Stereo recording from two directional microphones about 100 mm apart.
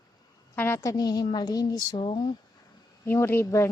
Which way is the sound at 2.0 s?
60° left (ahead or behind).